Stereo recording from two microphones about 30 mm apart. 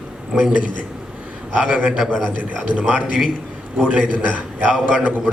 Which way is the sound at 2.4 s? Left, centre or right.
Right.